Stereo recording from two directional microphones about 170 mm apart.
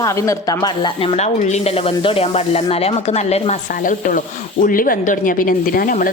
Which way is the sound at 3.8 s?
50° left (ahead or behind).